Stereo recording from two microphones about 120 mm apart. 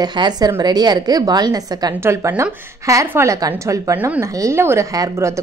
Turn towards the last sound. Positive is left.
turn(degrees=-25)  # may be behind; listen again after turning